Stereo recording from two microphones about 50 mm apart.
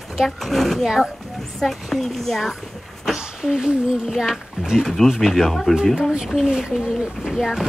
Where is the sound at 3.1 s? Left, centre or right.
Centre.